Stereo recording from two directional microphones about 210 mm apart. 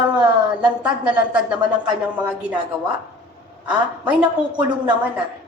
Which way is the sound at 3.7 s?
5° right (ahead or behind).